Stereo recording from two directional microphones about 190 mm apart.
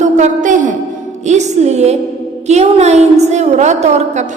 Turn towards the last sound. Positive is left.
turn(degrees=-35)  # may be behind; listen again after turning